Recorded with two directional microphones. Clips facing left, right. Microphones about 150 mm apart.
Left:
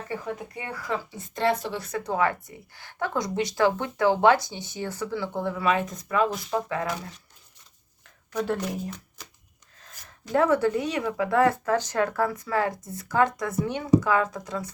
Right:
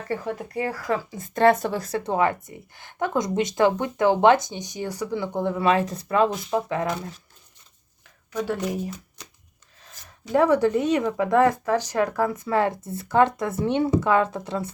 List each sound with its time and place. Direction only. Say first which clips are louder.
0.5 s speech: right 9 dB; 45° right (ahead or behind)
2.0 s speech: right 2 dB; 25° right (ahead or behind)
6.3 s speech: right 3 dB; 5° right (ahead or behind)
8.3 s speech: right 1 dB; 5° right (ahead or behind)
10.3 s speech: right 3 dB; 15° right (ahead or behind)